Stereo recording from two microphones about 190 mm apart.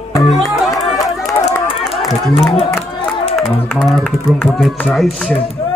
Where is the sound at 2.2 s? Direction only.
Centre (ahead or behind).